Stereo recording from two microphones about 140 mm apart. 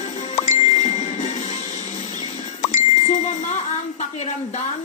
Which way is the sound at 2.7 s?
55° left (ahead or behind).